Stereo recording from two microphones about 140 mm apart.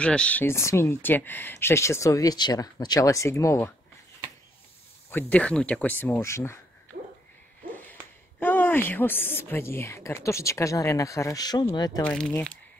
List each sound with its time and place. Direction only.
0.0 s speech: 5° left (ahead or behind)
5.1 s speech: 10° left (ahead or behind)
7.9 s a woman's voice: 15° left (ahead or behind); by 12.0 s 30° left (ahead or behind)
12.0 s speech: 10° left (ahead or behind)